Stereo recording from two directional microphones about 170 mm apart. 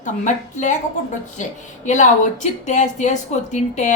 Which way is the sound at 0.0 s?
45° left (ahead or behind).